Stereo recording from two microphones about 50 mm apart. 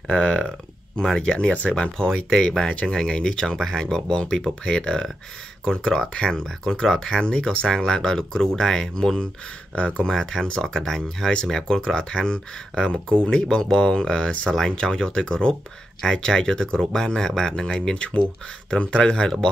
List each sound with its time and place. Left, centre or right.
0.1 s speech: centre
10.1 s speech: centre
17.9 s speech: left